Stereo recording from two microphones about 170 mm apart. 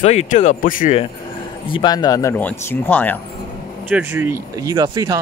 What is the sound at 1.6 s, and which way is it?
Speech, 30° left (ahead or behind).